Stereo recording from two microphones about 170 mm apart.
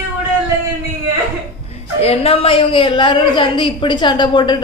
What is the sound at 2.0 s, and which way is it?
A woman's voice, 35° left (ahead or behind).